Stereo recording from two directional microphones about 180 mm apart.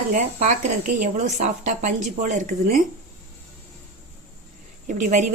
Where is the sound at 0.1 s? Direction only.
40° right (ahead or behind).